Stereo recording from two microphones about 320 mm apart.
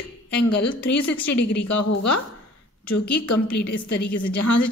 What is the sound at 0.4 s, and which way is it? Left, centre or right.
Speech, left.